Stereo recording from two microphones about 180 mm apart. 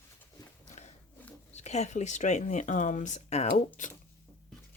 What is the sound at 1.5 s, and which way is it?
Speech, 40° left (ahead or behind).